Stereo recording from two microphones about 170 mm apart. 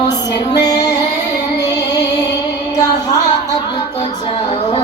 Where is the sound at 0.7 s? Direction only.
20° left (ahead or behind).